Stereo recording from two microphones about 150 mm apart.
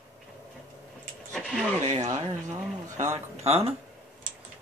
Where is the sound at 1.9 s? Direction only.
50° right (ahead or behind).